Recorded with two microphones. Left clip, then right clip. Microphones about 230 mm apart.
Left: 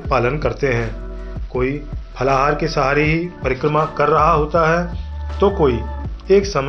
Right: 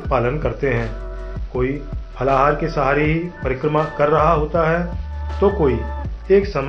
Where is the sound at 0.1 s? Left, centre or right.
Left.